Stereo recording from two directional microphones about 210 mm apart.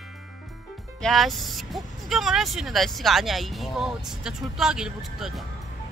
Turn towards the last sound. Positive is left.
turn(degrees=-5)  # may be behind; listen again after turning